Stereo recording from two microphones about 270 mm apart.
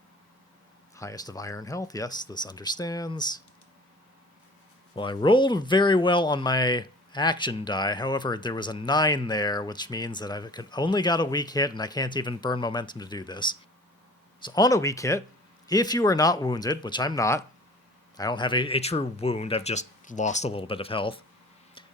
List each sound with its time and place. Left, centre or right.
0.9 s speech: centre
4.9 s speech: centre